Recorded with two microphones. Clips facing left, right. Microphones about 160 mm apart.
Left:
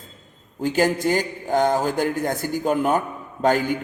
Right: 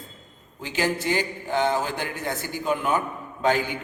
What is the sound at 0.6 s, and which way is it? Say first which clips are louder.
A man's voice: left 6 dB; 45° left (ahead or behind).